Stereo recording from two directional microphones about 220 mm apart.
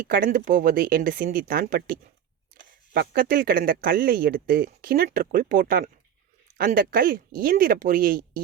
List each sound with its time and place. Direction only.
0.1 s speech: 40° right (ahead or behind)